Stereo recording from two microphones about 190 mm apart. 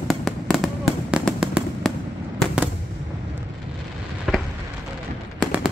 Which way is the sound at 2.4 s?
5° right (ahead or behind).